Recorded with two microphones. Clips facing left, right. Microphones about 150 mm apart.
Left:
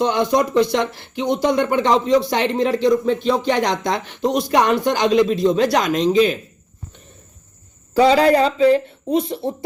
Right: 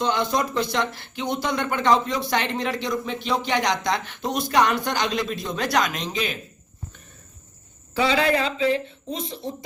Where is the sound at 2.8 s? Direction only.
45° left (ahead or behind).